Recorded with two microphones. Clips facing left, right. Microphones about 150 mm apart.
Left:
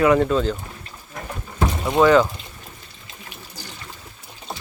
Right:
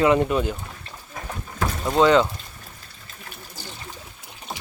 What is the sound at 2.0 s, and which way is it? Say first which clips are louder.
Speech: left 2 dB; 20° right (ahead or behind).